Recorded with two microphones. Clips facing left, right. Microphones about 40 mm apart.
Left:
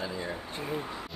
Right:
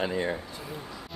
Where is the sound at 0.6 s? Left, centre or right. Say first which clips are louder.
Left 5 dB; left.